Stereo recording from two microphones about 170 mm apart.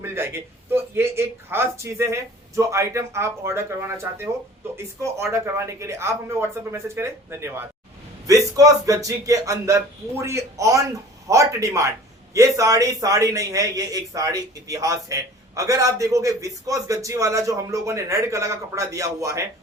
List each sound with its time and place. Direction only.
0.0 s a man's voice: 15° right (ahead or behind)